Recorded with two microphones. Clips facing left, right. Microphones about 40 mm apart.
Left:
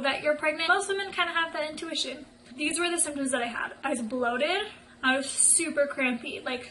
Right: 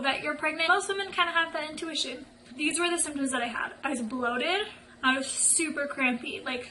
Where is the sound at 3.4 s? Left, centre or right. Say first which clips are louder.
Even; right.